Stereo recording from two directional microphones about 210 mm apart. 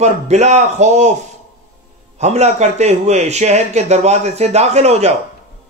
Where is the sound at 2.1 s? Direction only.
30° right (ahead or behind).